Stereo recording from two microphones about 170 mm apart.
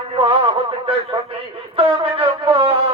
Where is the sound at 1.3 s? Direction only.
35° right (ahead or behind).